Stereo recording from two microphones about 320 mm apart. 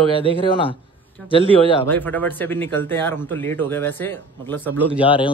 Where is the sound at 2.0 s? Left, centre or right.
Centre.